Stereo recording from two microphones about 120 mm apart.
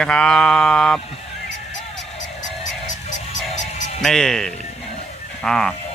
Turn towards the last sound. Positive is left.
turn(degrees=5)  # may be behind; listen again after turning